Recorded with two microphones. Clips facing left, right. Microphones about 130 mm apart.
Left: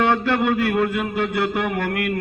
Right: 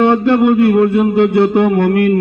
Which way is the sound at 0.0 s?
20° right (ahead or behind).